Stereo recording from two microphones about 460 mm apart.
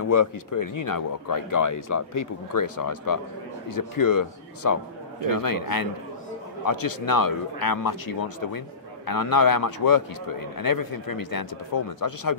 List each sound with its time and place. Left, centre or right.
0.1 s speech: left